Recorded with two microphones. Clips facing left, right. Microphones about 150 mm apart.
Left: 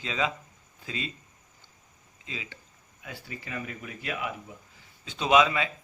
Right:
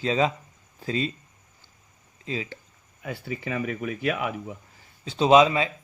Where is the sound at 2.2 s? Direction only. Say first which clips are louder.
Right 9 dB; 40° right (ahead or behind).